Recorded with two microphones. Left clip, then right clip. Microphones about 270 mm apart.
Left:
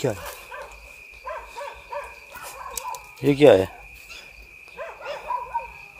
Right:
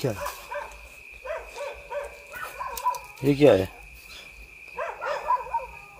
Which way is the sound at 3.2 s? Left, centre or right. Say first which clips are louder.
Left 4 dB; left.